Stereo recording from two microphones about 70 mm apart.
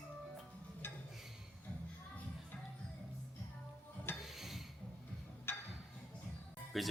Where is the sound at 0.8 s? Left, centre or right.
Left.